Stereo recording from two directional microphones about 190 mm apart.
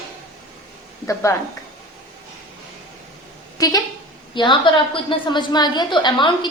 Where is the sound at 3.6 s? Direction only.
20° left (ahead or behind).